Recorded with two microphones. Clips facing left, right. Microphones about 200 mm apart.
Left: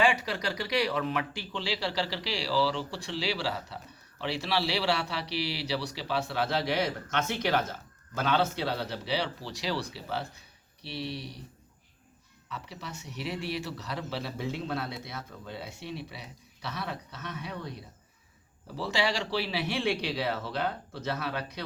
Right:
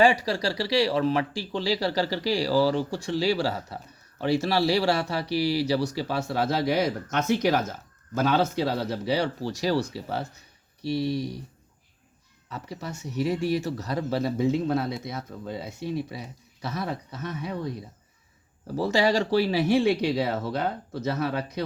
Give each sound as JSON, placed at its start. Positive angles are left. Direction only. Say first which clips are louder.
{"t": 0.0, "sound": "speech", "louder": "right 6 dB", "side_deg": -35}
{"t": 12.5, "sound": "speech", "louder": "right 6 dB", "side_deg": -45}
{"t": 18.8, "sound": "speech", "louder": "right 7 dB", "side_deg": -45}